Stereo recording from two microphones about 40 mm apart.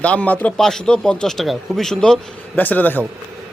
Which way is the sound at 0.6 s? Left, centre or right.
Centre.